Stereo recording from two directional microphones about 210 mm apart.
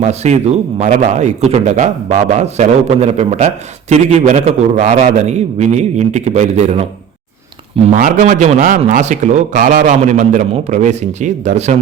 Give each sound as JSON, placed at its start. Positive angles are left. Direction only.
{"t": 0.0, "sound": "a man's voice", "side_deg": -30}
{"t": 7.9, "sound": "a man's voice", "side_deg": -35}